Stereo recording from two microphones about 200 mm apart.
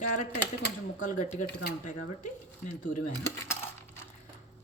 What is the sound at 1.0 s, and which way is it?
Speech, 40° left (ahead or behind).